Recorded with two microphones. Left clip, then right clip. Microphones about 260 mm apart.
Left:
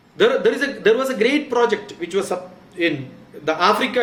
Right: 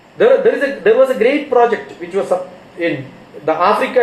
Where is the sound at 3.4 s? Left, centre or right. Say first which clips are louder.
Right 4 dB; left.